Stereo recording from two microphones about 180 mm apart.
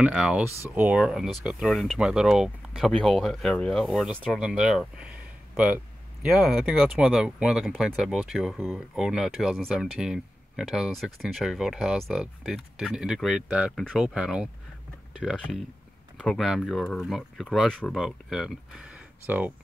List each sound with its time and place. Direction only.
0.0 s speech: 5° right (ahead or behind)